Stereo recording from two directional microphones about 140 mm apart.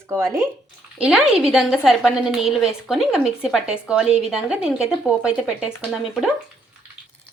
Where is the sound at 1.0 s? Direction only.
5° right (ahead or behind).